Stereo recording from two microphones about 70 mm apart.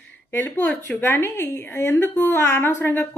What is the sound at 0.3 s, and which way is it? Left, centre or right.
Speech, left.